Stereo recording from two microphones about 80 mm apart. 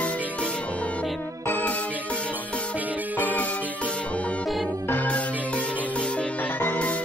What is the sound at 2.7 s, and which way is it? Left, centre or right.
Music, right.